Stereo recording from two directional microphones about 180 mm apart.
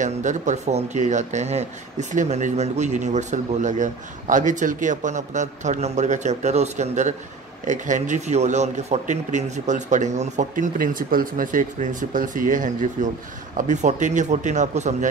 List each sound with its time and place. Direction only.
0.0 s speech: 40° right (ahead or behind)